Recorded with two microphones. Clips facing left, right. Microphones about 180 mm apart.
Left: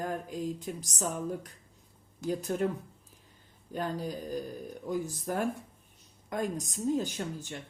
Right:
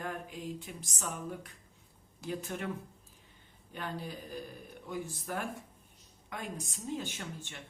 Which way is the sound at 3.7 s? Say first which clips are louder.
Left 6 dB; 40° left (ahead or behind).